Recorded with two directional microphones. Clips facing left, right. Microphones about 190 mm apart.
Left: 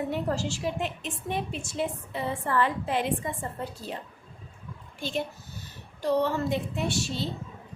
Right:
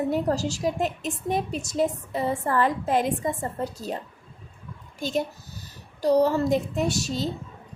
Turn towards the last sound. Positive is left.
turn(degrees=-40)  # may be behind; listen again after turning